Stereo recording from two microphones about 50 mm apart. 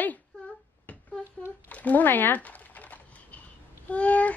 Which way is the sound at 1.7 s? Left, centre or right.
Left.